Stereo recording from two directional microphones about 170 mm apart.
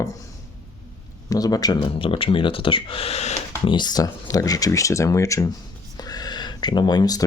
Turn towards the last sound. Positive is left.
turn(degrees=25)  # may be behind; listen again after turning